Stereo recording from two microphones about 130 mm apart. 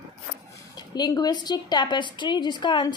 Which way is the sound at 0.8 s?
30° left (ahead or behind).